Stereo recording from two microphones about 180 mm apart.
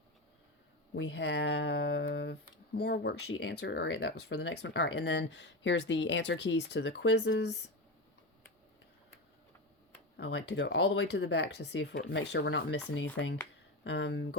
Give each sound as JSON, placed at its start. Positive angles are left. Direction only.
{"t": 0.9, "sound": "speech", "side_deg": 75}
{"t": 10.2, "sound": "speech", "side_deg": 80}